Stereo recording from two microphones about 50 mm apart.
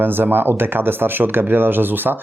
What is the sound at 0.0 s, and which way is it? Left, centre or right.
Speech, right.